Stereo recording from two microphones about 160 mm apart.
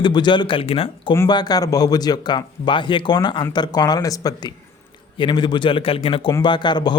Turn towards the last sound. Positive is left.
turn(degrees=25)  # may be behind; listen again after turning